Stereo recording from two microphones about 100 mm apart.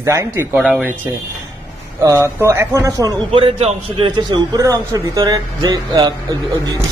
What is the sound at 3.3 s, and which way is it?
Speech, 80° right.